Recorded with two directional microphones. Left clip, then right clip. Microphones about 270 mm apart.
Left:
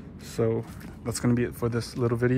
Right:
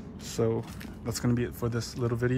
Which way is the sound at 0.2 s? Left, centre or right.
Centre.